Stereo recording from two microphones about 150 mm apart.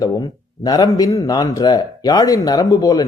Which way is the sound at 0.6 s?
25° left (ahead or behind).